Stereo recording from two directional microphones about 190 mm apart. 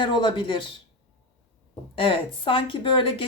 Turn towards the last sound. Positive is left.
turn(degrees=25)  # may be behind; listen again after turning